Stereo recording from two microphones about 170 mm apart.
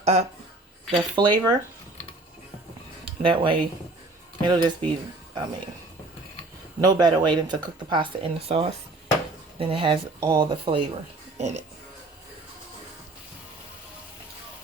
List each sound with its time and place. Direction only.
0.0 s speech: 40° right (ahead or behind)
0.9 s speech: 25° right (ahead or behind)
3.0 s speech: 30° right (ahead or behind)
6.8 s speech: 25° right (ahead or behind)
11.3 s speech: 40° right (ahead or behind)